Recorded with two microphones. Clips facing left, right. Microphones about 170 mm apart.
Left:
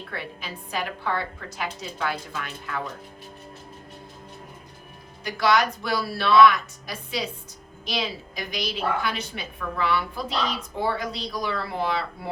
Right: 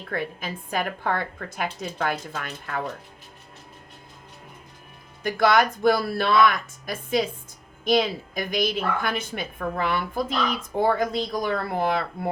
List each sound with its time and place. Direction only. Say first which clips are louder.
0.1 s a woman's voice: right 9 dB; 45° right (ahead or behind)
5.2 s a woman's voice: right 2 dB; 50° right (ahead or behind)